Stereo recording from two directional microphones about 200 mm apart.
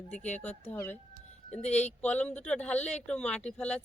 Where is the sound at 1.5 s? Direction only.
35° left (ahead or behind).